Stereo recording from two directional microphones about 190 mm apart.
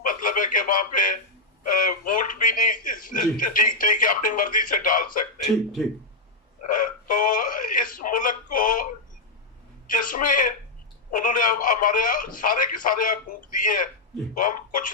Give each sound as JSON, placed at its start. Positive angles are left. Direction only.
{"t": 0.0, "sound": "radio", "side_deg": 45}
{"t": 1.6, "sound": "a man's voice", "side_deg": 45}
{"t": 6.6, "sound": "a man's voice", "side_deg": 45}